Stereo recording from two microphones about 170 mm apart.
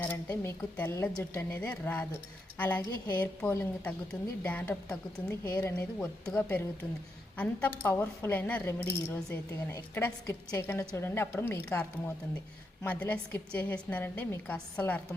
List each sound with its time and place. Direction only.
0.0 s speech: 10° left (ahead or behind)